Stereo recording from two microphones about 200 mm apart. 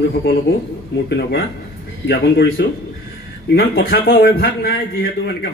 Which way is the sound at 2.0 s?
55° left (ahead or behind).